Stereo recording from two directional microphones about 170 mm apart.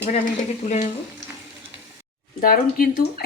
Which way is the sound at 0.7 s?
45° left (ahead or behind).